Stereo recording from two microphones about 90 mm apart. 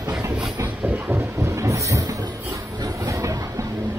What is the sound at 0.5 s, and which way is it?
Train, 30° right (ahead or behind).